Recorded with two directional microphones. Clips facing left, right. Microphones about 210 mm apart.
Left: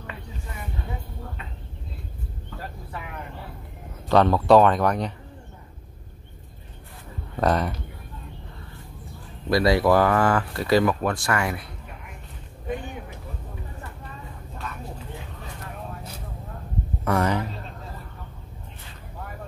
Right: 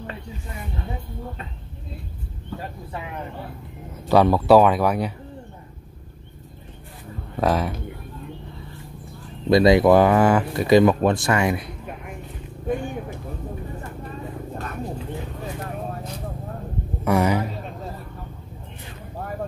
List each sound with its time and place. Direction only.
4.1 s speech: 10° right (ahead or behind)
7.3 s a man's voice: centre (ahead or behind)
9.5 s speech: 20° right (ahead or behind)
12.6 s a sound: 45° right (ahead or behind)
17.0 s a man's voice: 10° right (ahead or behind)